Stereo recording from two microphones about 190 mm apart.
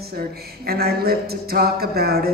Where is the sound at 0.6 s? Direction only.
55° right (ahead or behind).